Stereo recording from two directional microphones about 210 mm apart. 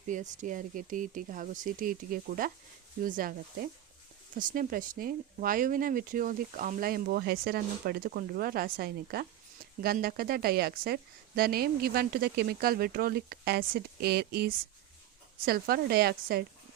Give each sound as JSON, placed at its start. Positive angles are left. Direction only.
{"t": 0.1, "sound": "speech", "side_deg": -35}